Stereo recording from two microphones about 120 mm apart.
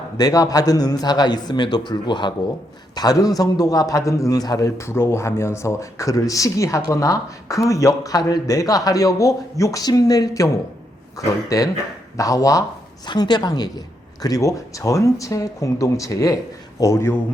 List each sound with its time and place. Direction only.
0.2 s a man's voice: 30° left (ahead or behind)